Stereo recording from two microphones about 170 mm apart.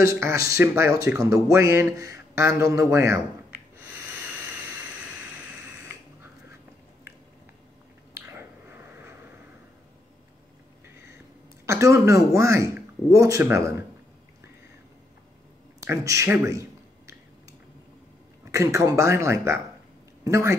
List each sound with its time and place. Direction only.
0.0 s speech: 15° right (ahead or behind)
8.1 s finger snapping: 15° right (ahead or behind)
11.6 s speech: 15° right (ahead or behind)
15.8 s speech: 15° right (ahead or behind)
18.4 s speech: 15° right (ahead or behind)